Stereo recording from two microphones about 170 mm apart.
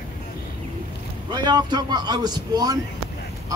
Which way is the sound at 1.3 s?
25° right (ahead or behind).